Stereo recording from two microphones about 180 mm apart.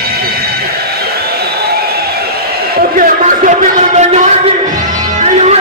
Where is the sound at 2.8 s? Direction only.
50° right (ahead or behind).